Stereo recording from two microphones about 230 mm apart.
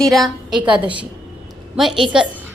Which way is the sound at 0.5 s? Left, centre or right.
Centre.